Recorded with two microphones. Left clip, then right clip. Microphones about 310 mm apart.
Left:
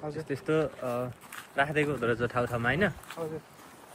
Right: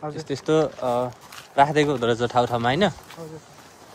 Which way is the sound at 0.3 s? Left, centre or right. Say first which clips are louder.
Right 8 dB; centre.